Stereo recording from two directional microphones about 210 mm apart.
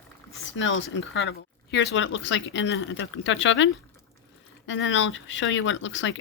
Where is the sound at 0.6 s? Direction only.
60° left (ahead or behind).